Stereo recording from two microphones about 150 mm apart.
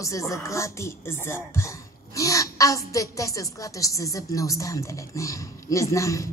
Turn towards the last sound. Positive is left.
turn(degrees=20)  # may be behind; listen again after turning